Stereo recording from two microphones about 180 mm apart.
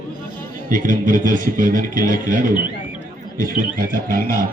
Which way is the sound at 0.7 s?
45° right (ahead or behind).